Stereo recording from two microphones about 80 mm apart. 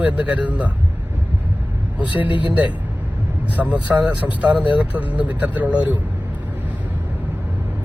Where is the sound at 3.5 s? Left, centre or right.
Centre.